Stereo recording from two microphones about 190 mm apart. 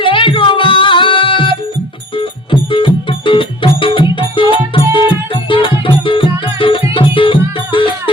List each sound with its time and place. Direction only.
0.0 s music: 25° left (ahead or behind)